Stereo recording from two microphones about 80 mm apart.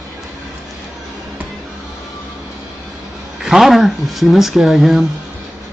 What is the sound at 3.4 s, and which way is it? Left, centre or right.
Speech, centre.